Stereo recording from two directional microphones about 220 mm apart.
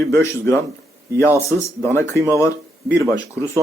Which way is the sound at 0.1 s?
15° left (ahead or behind).